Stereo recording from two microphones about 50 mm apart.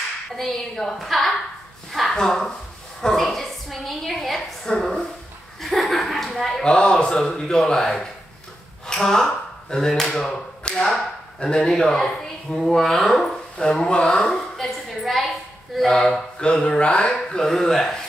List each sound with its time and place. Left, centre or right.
0.4 s a woman's voice: centre
1.9 s a sound: centre
2.1 s a woman's voice: centre
6.6 s speech: centre